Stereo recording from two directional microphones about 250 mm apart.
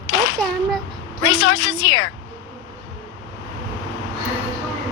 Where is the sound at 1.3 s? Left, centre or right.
Left.